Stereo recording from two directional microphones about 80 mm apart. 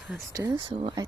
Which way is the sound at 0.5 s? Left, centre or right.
Right.